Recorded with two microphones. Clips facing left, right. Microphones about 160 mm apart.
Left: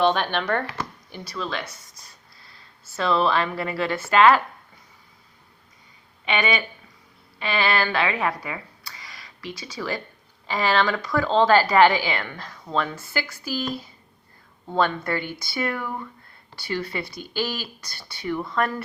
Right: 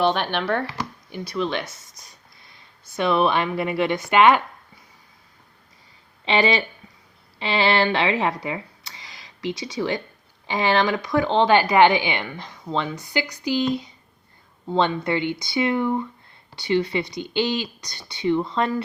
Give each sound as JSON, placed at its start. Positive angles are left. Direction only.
{"t": 0.2, "sound": "speech", "side_deg": -10}
{"t": 2.9, "sound": "speech", "side_deg": -20}
{"t": 6.2, "sound": "speech", "side_deg": -30}